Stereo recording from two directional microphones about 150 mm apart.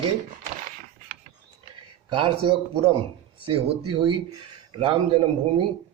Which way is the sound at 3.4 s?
30° right (ahead or behind).